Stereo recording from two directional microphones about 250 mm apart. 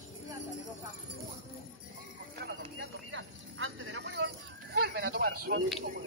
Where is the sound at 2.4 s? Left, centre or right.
Right.